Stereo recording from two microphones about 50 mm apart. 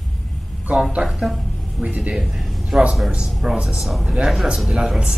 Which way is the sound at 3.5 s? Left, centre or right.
Centre.